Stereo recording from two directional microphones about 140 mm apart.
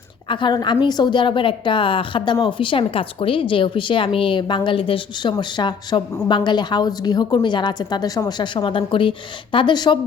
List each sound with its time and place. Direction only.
0.3 s a woman's voice: 35° left (ahead or behind)